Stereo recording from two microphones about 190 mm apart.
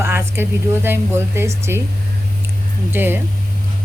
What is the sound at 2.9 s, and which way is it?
Speech, 10° right (ahead or behind).